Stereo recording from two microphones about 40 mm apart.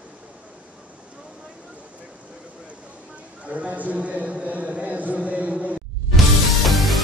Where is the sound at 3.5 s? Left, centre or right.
Right.